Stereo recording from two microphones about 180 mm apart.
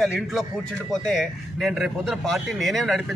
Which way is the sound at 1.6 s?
Centre (ahead or behind).